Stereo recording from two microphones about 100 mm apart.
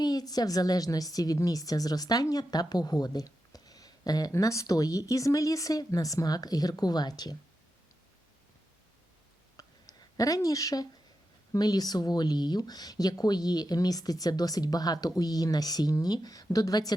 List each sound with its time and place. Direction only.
0.0 s a woman's voice: 40° left (ahead or behind)
9.6 s a sound: 40° left (ahead or behind)
11.5 s a woman's voice: 40° left (ahead or behind)